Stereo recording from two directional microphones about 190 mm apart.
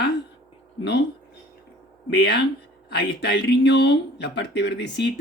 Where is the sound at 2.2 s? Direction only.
60° left (ahead or behind).